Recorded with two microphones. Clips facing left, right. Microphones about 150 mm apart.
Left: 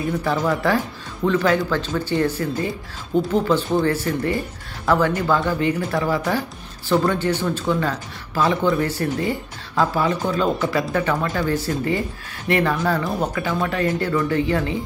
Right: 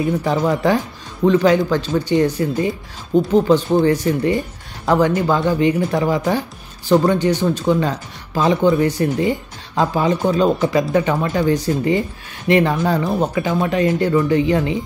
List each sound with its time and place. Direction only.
0.2 s speech: 20° right (ahead or behind)